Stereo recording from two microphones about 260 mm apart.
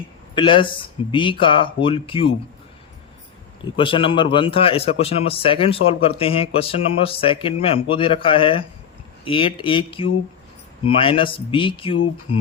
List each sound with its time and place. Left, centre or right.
0.3 s a man's voice: centre
3.8 s a man's voice: centre